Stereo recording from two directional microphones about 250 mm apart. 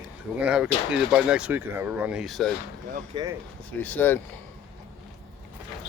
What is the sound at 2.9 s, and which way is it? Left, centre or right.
Speech, centre.